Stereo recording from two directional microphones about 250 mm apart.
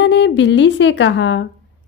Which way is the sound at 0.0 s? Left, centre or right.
Left.